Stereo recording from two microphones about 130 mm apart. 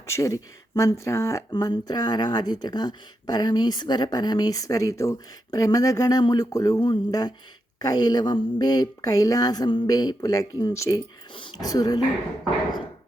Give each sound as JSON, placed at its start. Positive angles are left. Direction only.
{"t": 0.1, "sound": "speech", "side_deg": 25}